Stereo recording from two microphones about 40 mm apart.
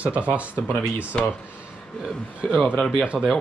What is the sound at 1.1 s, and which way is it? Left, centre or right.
Speech, left.